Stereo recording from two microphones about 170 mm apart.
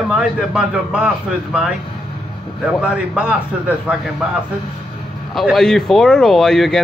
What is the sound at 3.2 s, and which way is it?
Speech, 5° right (ahead or behind).